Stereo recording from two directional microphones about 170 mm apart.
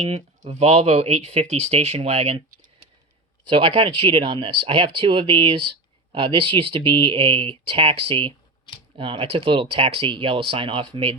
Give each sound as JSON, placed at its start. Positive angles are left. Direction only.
{"t": 0.0, "sound": "speech", "side_deg": -35}
{"t": 3.6, "sound": "speech", "side_deg": -35}